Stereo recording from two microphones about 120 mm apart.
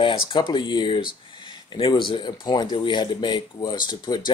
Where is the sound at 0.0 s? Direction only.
45° left (ahead or behind).